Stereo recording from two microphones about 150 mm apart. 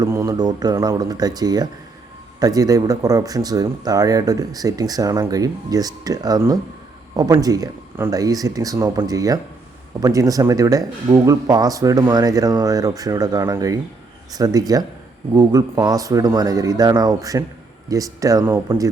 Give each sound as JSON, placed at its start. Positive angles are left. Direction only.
{"t": 0.0, "sound": "speech", "side_deg": -20}